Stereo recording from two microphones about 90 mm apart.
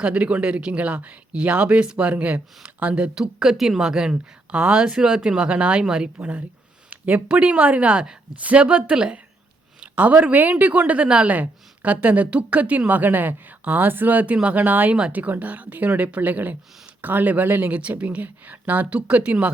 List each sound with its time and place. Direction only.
0.0 s speech: 15° right (ahead or behind)